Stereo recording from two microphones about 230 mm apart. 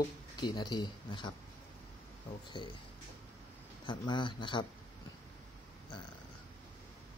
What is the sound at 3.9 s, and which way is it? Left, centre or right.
Speech, left.